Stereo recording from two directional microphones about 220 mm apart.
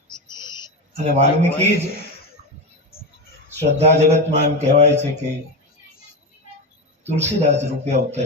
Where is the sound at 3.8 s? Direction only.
30° right (ahead or behind).